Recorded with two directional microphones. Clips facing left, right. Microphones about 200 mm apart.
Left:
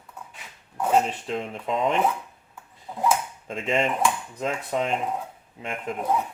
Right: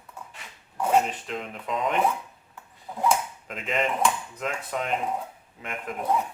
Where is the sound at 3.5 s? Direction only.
30° left (ahead or behind).